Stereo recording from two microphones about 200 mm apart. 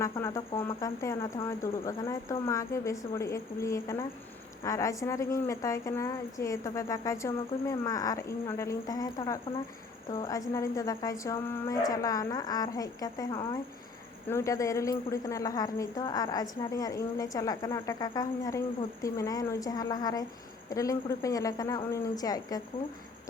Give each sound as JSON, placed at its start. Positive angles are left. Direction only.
{"t": 0.0, "sound": "a woman's voice", "side_deg": 15}